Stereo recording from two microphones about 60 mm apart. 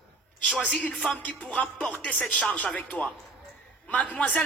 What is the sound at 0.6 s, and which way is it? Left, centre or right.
A man's voice, centre.